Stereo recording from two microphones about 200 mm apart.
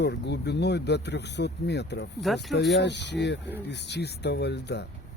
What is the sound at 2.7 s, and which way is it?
Speech, 60° left (ahead or behind).